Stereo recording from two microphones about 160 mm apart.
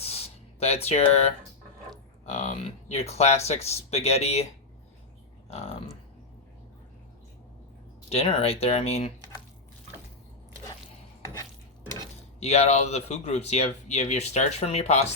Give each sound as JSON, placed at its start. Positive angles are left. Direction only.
{"t": 0.0, "sound": "a sound", "side_deg": 40}
{"t": 2.2, "sound": "speech", "side_deg": 40}
{"t": 5.5, "sound": "speech", "side_deg": 40}
{"t": 8.1, "sound": "speech", "side_deg": 40}
{"t": 12.4, "sound": "speech", "side_deg": 40}